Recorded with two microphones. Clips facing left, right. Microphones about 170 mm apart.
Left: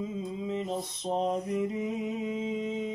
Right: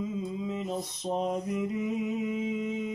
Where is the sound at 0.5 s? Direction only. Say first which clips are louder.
Left 1 dB; 30° left (ahead or behind).